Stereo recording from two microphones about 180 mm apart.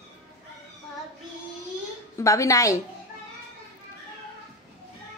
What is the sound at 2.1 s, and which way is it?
Speech, 15° left (ahead or behind).